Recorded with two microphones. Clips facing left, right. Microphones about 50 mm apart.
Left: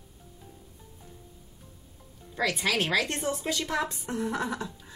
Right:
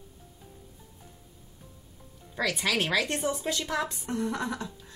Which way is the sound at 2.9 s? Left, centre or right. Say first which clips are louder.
Even; centre.